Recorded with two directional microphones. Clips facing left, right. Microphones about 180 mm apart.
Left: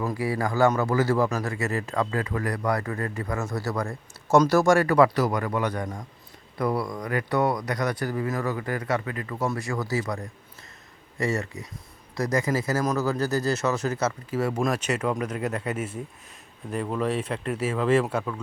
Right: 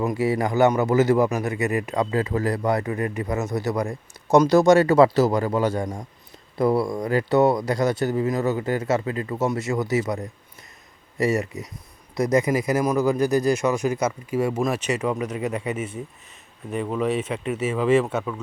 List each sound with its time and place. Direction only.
0.0 s speech: 20° right (ahead or behind); by 18.3 s 5° right (ahead or behind)